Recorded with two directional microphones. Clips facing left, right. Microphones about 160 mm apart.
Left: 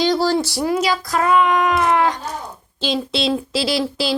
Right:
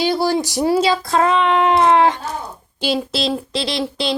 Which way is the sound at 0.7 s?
30° right (ahead or behind).